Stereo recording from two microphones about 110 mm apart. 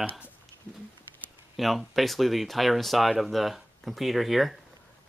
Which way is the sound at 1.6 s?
Centre (ahead or behind).